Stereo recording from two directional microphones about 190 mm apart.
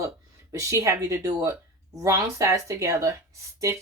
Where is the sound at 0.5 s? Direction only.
15° right (ahead or behind).